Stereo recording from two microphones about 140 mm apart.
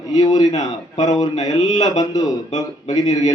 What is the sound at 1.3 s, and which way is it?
Mantra, 55° left (ahead or behind).